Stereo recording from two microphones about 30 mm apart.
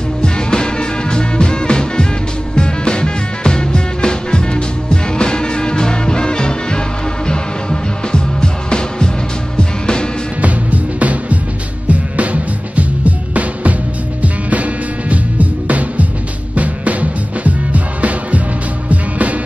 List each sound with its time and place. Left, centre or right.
0.2 s music: left
10.4 s music: right